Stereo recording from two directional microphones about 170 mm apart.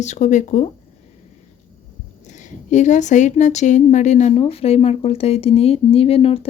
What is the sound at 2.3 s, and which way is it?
A woman's voice, 45° left (ahead or behind).